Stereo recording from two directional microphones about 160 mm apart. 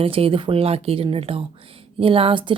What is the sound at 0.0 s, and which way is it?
Speech, 35° right (ahead or behind).